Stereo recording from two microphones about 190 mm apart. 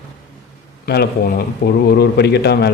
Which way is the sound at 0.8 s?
60° left (ahead or behind).